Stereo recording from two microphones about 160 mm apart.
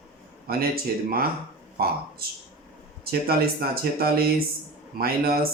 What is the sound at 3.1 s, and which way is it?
Speech, 70° right (ahead or behind).